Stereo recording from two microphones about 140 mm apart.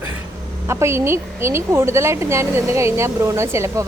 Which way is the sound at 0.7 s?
20° right (ahead or behind).